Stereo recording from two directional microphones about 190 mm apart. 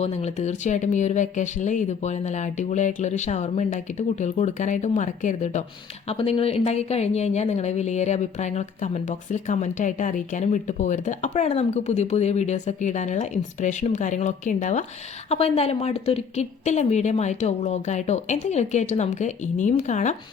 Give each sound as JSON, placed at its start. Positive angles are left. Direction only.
{"t": 0.0, "sound": "speech", "side_deg": 35}